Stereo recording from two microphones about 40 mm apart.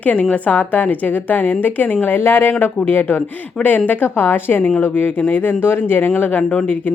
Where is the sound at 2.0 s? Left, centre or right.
Left.